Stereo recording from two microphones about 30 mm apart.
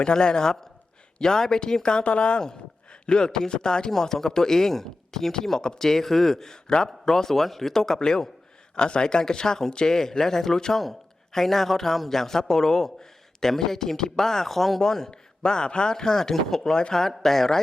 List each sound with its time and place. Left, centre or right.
0.0 s speech: left
2.0 s a woman's voice: left
3.9 s a man's voice: centre
5.3 s speech: centre
5.8 s a man's voice: centre
15.1 s a man's voice: left; by 17.6 s centre